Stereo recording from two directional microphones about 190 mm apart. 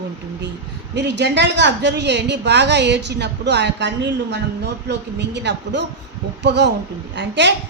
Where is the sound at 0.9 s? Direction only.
65° right (ahead or behind).